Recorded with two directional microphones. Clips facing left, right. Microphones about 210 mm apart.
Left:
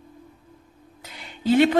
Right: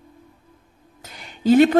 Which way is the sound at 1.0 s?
45° right (ahead or behind).